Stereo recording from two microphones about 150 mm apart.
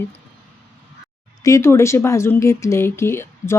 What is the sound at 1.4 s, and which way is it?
Speech, 20° left (ahead or behind).